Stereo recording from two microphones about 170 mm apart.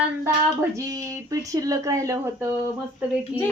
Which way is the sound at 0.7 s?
20° right (ahead or behind).